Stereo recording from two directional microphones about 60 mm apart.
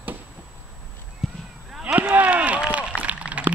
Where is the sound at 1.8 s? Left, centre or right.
Right.